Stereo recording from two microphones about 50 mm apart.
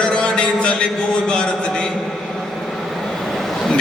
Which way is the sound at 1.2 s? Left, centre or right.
Centre.